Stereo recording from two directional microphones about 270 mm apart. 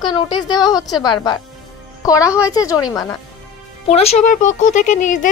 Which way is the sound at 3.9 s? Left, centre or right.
Left.